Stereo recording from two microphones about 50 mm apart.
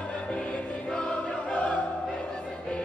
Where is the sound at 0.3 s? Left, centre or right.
Left.